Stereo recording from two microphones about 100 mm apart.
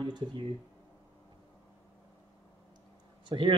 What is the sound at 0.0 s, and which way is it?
Speech, 50° right (ahead or behind).